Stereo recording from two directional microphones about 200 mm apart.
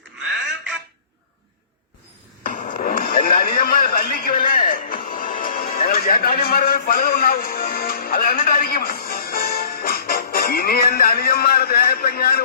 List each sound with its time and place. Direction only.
2.5 s music: 40° left (ahead or behind)